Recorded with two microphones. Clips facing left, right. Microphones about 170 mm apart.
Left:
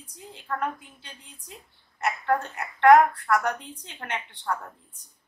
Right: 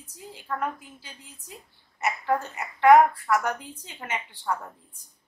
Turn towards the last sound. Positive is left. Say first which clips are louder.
# right 1 dB
turn(degrees=-5)  # may be behind; listen again after turning